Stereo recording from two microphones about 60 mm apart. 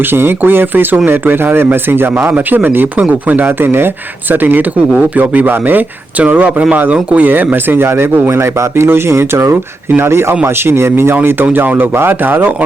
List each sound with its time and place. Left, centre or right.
0.1 s speech: right